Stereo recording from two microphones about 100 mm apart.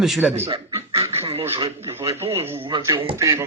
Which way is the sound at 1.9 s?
25° right (ahead or behind).